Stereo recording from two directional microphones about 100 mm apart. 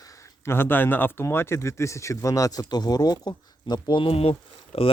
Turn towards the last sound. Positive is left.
turn(degrees=75)  # may be behind; listen again after turning